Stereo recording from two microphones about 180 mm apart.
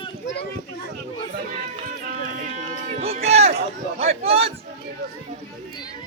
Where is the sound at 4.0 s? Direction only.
35° right (ahead or behind).